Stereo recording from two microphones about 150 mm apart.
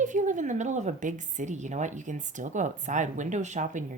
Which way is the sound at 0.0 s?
55° right (ahead or behind).